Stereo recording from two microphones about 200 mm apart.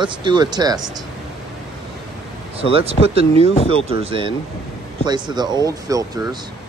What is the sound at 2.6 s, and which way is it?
Speech, 30° right (ahead or behind).